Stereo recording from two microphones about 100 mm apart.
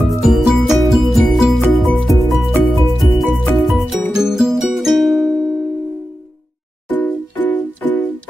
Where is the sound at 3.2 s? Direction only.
Centre (ahead or behind).